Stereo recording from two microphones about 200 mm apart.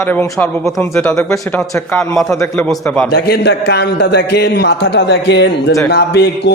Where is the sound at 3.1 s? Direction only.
50° left (ahead or behind).